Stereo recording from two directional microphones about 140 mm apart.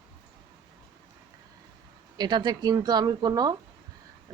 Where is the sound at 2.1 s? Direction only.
30° right (ahead or behind).